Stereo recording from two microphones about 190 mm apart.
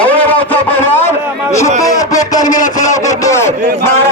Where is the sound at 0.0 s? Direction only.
10° left (ahead or behind).